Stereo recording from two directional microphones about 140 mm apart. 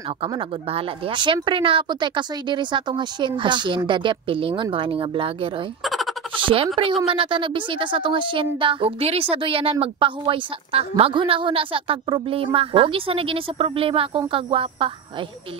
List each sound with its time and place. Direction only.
0.3 s speech: 40° right (ahead or behind)
5.9 s a sound: centre (ahead or behind)
6.3 s speech: 40° right (ahead or behind)